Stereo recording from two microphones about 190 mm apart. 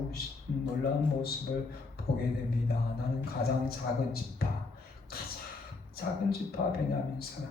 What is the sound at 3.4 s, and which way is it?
A man's voice, 55° left (ahead or behind).